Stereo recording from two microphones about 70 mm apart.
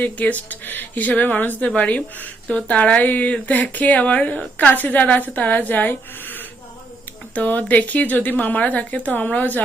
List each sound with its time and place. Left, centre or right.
0.0 s speech: left